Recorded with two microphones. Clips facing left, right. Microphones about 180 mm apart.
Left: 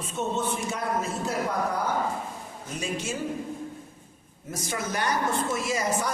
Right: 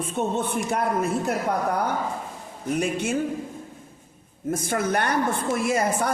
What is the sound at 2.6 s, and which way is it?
Speech, 60° right (ahead or behind).